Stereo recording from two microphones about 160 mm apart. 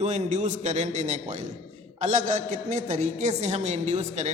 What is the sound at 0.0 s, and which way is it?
A woman's voice, 45° right (ahead or behind).